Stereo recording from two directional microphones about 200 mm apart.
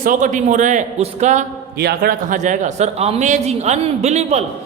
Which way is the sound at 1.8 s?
50° right (ahead or behind).